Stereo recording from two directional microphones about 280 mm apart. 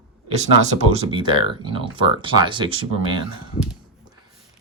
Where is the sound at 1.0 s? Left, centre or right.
Centre.